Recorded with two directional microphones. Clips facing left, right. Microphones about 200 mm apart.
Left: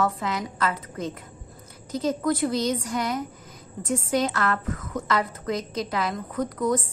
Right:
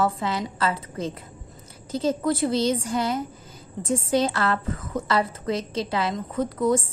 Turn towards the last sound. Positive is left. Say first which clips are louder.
# right 2 dB
turn(degrees=-25)  # may be behind; listen again after turning